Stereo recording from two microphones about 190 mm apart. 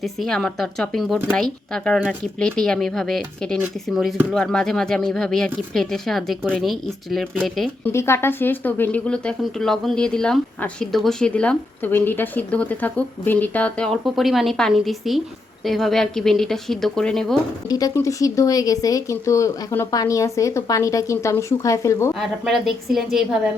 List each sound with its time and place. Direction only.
0.0 s speech: centre (ahead or behind)
7.9 s speech: 15° left (ahead or behind)
17.7 s speech: 20° left (ahead or behind)
22.1 s speech: centre (ahead or behind)